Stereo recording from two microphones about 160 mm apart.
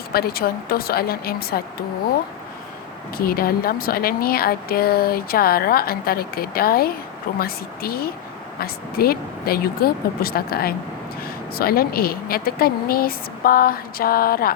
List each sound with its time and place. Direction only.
0.1 s speech: 75° left (ahead or behind)
3.2 s speech: 65° left (ahead or behind)